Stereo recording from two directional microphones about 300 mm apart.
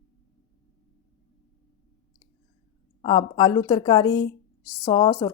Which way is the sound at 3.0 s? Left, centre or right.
Centre.